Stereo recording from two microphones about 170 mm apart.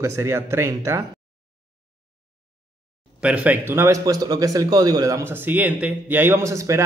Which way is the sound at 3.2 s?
10° right (ahead or behind).